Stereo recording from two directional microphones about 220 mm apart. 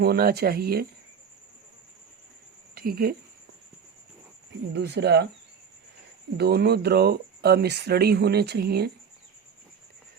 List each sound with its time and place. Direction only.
0.0 s speech: 45° right (ahead or behind)
2.7 s speech: 45° right (ahead or behind)
4.7 s speech: 50° right (ahead or behind)
6.3 s speech: 50° right (ahead or behind)